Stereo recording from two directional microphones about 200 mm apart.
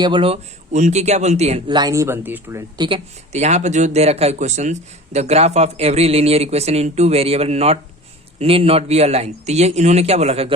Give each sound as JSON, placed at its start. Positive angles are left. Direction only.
{"t": 0.0, "sound": "speech", "side_deg": -25}